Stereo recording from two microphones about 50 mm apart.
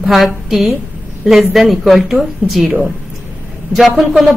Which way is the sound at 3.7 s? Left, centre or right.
Right.